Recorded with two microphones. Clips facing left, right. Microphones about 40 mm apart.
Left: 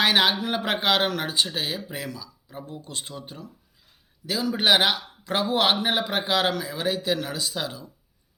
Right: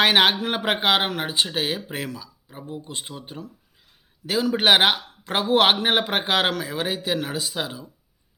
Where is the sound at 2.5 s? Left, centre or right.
Right.